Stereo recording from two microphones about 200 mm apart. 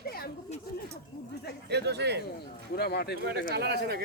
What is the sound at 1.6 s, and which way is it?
Speech, 55° right (ahead or behind).